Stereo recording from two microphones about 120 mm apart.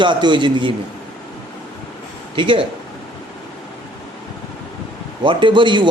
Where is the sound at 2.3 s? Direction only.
40° right (ahead or behind).